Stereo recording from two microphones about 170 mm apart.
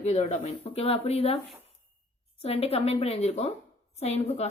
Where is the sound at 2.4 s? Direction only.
35° left (ahead or behind).